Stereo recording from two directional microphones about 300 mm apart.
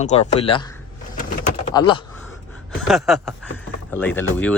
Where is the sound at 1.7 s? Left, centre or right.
Centre.